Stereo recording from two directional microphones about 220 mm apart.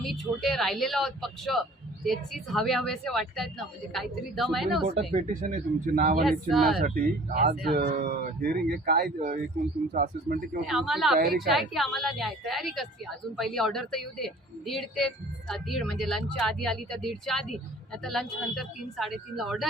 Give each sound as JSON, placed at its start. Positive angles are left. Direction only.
{"t": 0.0, "sound": "a woman's voice", "side_deg": 0}
{"t": 5.3, "sound": "speech", "side_deg": -35}
{"t": 6.2, "sound": "a woman's voice", "side_deg": 0}
{"t": 6.8, "sound": "speech", "side_deg": -40}
{"t": 10.7, "sound": "a woman's voice", "side_deg": 0}